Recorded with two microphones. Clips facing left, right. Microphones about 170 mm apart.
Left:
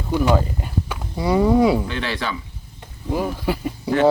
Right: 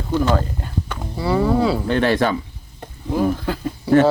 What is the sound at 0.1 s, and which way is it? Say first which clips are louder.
Speech: even; 10° left (ahead or behind).